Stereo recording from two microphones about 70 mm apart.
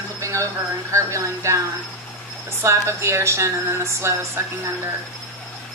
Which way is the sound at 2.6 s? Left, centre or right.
Right.